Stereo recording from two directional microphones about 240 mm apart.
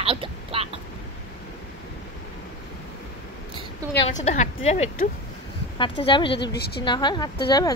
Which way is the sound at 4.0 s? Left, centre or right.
Left.